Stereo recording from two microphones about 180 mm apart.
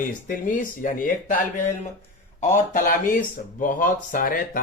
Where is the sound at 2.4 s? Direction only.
40° left (ahead or behind).